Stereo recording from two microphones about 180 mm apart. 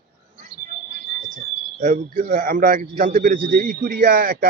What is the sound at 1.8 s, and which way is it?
Speech, 45° right (ahead or behind).